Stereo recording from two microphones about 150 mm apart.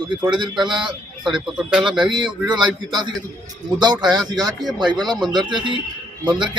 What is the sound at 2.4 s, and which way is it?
Speech, 25° right (ahead or behind).